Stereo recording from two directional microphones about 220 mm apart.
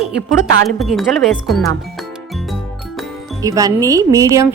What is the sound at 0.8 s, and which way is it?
Speech, centre (ahead or behind).